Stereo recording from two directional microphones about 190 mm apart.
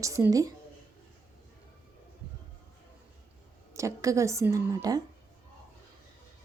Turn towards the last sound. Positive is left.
turn(degrees=-20)  # may be behind; listen again after turning